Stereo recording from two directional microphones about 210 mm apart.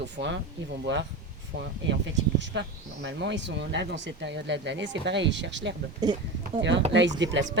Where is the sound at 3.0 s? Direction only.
55° right (ahead or behind).